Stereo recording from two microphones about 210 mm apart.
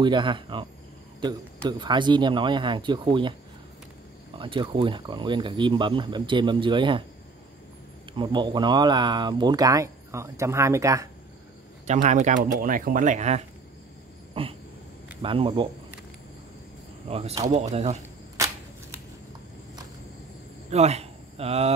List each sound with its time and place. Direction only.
0.0 s speech: 25° right (ahead or behind)
1.7 s speech: 20° right (ahead or behind)
4.4 s speech: 25° right (ahead or behind)
8.1 s speech: 20° right (ahead or behind)
11.8 s speech: 35° right (ahead or behind)
17.1 s speech: 30° right (ahead or behind)
18.4 s shuffling cards: 15° right (ahead or behind)
20.7 s speech: 30° right (ahead or behind)